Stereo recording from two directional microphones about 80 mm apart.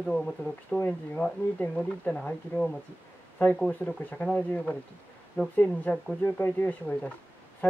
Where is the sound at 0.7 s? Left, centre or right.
Centre.